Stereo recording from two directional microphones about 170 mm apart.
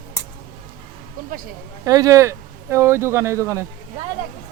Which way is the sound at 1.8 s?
20° right (ahead or behind).